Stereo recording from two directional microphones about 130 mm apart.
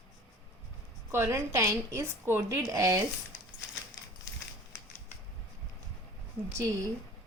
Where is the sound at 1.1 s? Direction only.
20° right (ahead or behind).